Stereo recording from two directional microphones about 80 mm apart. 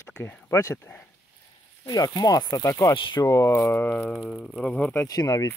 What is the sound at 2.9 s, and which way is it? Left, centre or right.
Speech, left.